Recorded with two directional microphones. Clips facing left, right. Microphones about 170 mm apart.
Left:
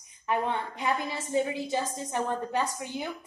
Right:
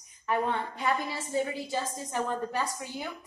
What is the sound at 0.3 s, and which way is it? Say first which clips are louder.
A woman's voice: even; 15° left (ahead or behind).